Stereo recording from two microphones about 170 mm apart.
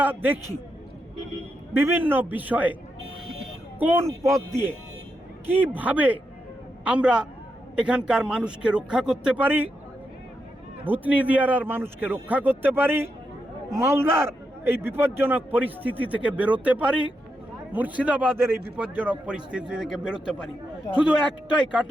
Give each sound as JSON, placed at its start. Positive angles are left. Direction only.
{"t": 0.0, "sound": "a man's voice", "side_deg": -10}
{"t": 1.7, "sound": "a man's voice", "side_deg": -10}
{"t": 3.8, "sound": "a man's voice", "side_deg": -10}
{"t": 10.8, "sound": "a man's voice", "side_deg": -10}